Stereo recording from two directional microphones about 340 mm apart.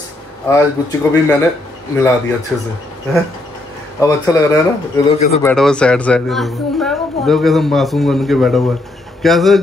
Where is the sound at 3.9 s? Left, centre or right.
Centre.